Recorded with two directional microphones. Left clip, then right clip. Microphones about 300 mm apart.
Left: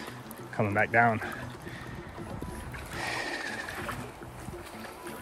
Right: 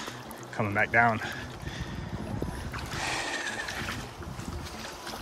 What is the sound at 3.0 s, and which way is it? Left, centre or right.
Music, centre.